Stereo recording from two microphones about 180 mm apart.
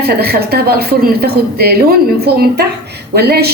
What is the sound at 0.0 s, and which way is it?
Speech, 60° right (ahead or behind).